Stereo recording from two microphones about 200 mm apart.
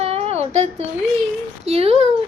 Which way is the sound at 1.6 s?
30° right (ahead or behind).